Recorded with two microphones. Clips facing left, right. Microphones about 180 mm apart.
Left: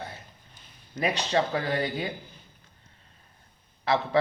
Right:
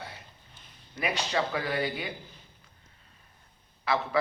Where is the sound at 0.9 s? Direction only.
35° left (ahead or behind).